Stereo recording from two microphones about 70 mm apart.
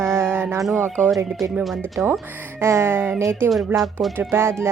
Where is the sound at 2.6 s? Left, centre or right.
Right.